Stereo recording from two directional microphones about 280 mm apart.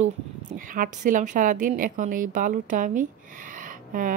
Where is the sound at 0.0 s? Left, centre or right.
Right.